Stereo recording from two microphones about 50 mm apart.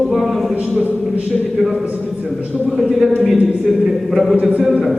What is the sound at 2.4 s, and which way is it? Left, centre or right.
Speech, centre.